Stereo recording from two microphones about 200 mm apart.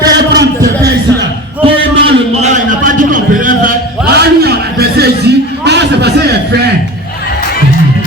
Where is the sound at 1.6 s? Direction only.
30° right (ahead or behind).